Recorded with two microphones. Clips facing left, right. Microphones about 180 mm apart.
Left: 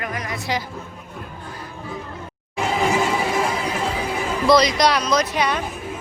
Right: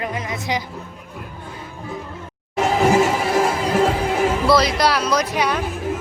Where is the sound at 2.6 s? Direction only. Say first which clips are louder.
Right 5 dB; 85° right.